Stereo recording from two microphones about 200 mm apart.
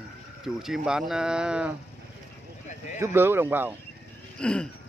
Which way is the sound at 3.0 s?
10° right (ahead or behind).